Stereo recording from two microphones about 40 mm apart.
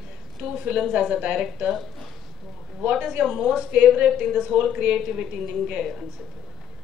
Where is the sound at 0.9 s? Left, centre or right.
Right.